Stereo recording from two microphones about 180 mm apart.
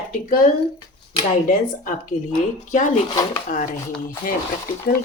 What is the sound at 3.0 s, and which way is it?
Speech, 20° left (ahead or behind).